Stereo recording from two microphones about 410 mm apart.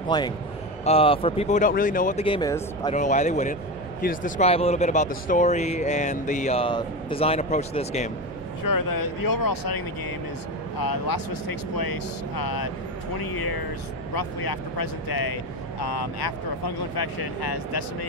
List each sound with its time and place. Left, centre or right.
0.1 s speech: centre
8.6 s speech: left